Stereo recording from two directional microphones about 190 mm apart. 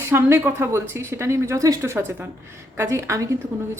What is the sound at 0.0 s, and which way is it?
A woman's voice, 15° right (ahead or behind).